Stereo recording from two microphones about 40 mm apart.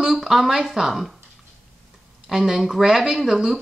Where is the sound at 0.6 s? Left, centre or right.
Centre.